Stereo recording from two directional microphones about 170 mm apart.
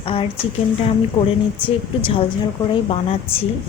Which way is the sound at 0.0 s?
35° left (ahead or behind).